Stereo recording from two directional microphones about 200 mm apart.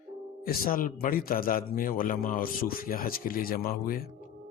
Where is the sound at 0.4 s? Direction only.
45° left (ahead or behind).